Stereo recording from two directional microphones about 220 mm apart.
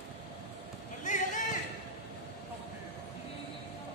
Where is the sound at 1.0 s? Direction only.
35° left (ahead or behind).